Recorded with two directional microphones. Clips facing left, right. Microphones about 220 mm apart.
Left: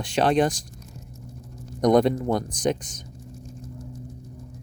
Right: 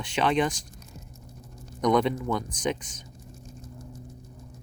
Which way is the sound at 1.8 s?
40° left (ahead or behind).